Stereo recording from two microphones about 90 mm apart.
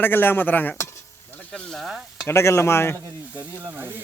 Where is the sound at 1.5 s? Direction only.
5° left (ahead or behind).